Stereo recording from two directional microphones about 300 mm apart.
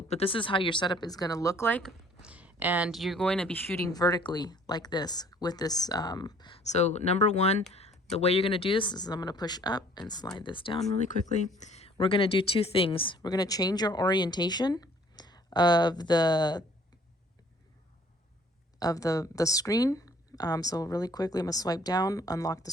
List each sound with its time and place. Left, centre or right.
0.1 s speech: centre
2.2 s speech: centre; by 7.6 s left
7.7 s a sound: left
8.1 s speech: left
18.8 s speech: centre